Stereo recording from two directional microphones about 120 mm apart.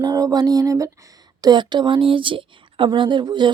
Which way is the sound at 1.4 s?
40° right (ahead or behind).